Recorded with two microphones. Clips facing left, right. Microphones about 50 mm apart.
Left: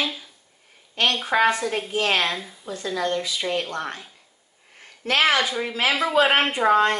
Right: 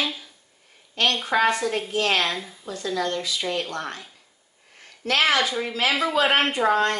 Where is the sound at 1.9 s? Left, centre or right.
Left.